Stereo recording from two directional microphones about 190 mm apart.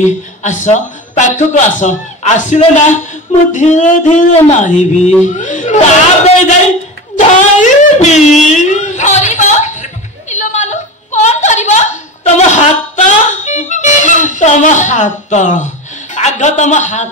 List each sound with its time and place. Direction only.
0.0 s a man's voice: 40° left (ahead or behind)
5.2 s a sound: 40° left (ahead or behind)
16.2 s speech: 40° left (ahead or behind)